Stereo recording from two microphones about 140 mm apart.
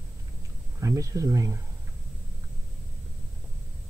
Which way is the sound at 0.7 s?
25° right (ahead or behind).